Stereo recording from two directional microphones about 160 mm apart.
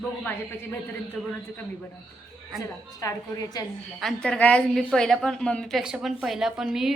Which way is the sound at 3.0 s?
25° left (ahead or behind).